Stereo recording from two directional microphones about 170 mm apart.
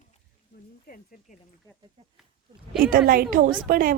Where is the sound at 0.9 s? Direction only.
65° left (ahead or behind).